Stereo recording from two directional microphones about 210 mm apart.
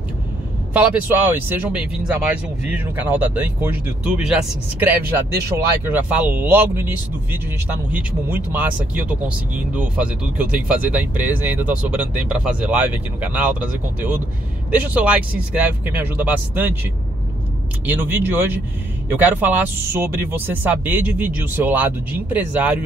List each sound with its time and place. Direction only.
0.7 s speech: 10° right (ahead or behind)
5.5 s speech: 20° right (ahead or behind)
5.9 s speech: 5° right (ahead or behind)
7.9 s speech: 10° right (ahead or behind)
17.8 s speech: 10° right (ahead or behind)